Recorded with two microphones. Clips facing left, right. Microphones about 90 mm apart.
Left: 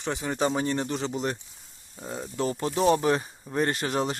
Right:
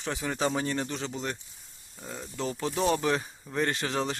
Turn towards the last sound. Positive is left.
turn(degrees=5)  # may be behind; listen again after turning